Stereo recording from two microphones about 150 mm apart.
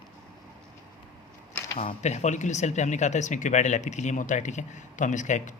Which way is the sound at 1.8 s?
50° left (ahead or behind).